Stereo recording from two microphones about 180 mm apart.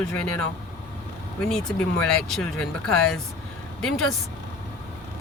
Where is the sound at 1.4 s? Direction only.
5° left (ahead or behind).